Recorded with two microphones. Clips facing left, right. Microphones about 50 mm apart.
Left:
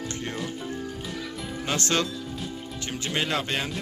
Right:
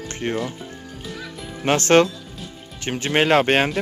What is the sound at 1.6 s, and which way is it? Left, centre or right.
Speech, right.